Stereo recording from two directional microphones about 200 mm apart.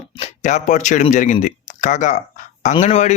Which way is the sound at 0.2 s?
35° left (ahead or behind).